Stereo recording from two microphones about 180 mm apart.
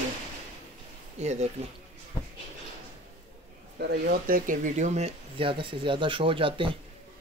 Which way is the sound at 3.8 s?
60° right (ahead or behind).